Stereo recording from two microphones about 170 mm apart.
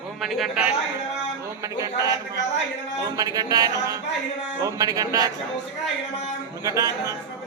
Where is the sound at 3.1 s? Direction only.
20° right (ahead or behind).